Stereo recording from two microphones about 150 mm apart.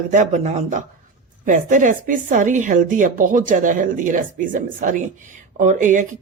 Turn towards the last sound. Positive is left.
turn(degrees=-60)  # may be behind; listen again after turning